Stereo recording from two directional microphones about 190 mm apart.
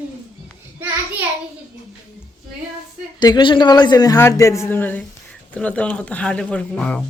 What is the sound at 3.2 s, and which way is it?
A man's voice, 25° left (ahead or behind).